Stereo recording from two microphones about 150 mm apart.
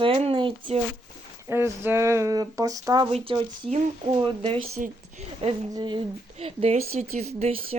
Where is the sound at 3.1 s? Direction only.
35° right (ahead or behind).